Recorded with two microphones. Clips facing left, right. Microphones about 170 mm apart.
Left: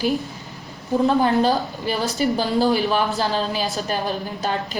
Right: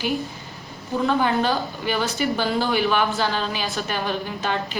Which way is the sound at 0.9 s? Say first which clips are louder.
Left 3 dB; 35° left (ahead or behind).